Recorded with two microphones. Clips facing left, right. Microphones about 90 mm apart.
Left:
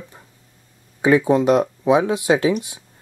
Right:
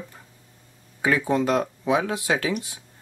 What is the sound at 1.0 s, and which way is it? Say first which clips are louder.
Speech: left 7 dB; 20° left (ahead or behind).